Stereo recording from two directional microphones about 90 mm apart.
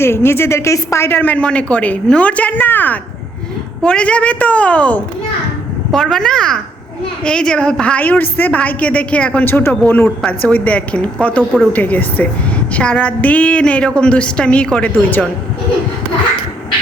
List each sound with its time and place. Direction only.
0.0 s a woman's voice: 25° left (ahead or behind)
1.2 s a woman's voice: 15° left (ahead or behind)